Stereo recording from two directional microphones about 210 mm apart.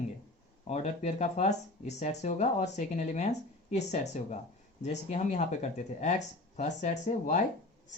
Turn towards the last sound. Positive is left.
turn(degrees=35)  # may be behind; listen again after turning